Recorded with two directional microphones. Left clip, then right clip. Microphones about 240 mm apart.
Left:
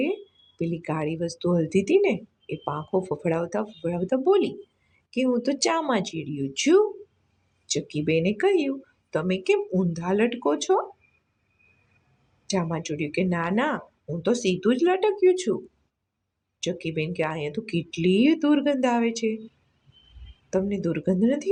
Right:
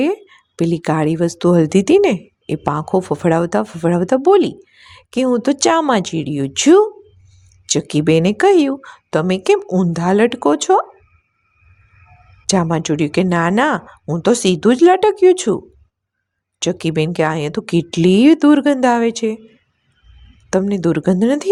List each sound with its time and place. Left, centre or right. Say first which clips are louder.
0.0 s speech: right 9 dB; right
12.5 s speech: right 11 dB; right
16.6 s speech: right 10 dB; right
20.5 s speech: right 10 dB; right